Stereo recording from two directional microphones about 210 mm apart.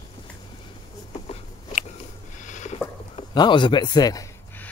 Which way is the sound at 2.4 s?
35° left (ahead or behind).